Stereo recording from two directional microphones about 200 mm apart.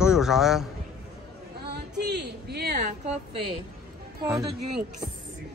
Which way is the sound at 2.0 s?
55° right (ahead or behind).